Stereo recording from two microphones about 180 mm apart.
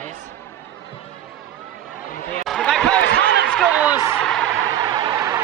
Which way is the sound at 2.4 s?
Centre (ahead or behind).